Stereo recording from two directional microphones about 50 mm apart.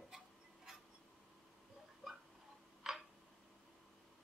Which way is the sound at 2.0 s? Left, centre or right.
Centre.